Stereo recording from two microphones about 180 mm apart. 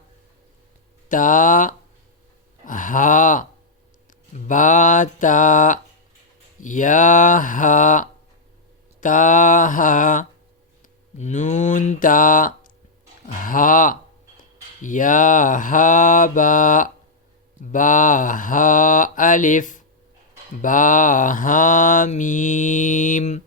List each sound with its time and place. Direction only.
1.0 s mantra: 45° left (ahead or behind)
4.4 s mantra: 45° left (ahead or behind)
13.2 s speech: 50° left (ahead or behind)
14.8 s mantra: 45° left (ahead or behind)